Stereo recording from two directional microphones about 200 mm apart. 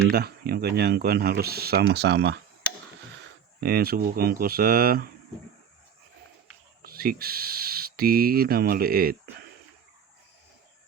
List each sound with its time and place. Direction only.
0.1 s speech: 50° right (ahead or behind)
3.6 s speech: 50° right (ahead or behind)
6.8 s speech: 50° right (ahead or behind)